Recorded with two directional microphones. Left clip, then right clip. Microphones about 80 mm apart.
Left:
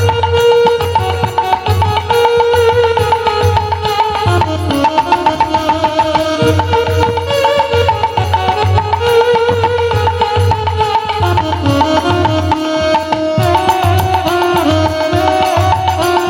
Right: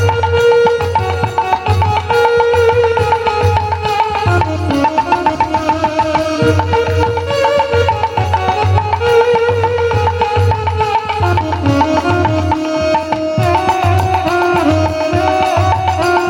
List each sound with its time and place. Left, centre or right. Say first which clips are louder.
0.3 s music: left 1 dB; centre
9.0 s music: even; centre
11.8 s music: left 1 dB; centre
13.5 s music: left 1 dB; centre